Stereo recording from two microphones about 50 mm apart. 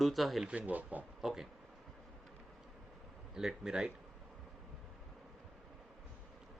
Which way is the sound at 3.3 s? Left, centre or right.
Centre.